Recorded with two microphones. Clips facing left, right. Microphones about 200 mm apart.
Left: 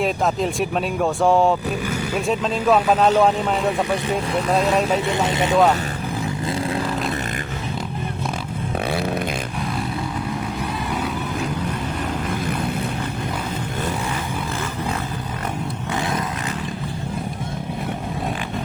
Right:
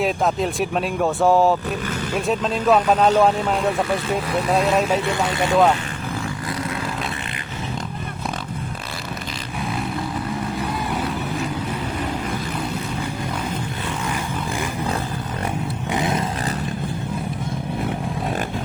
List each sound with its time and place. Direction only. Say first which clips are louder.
0.0 s speech: even; centre (ahead or behind)
5.0 s speech: left 1 dB; 20° left (ahead or behind)
10.9 s vehicle: even; centre (ahead or behind)